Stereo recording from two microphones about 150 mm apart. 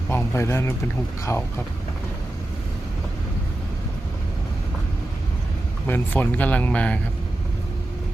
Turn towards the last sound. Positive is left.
turn(degrees=10)  # may be behind; listen again after turning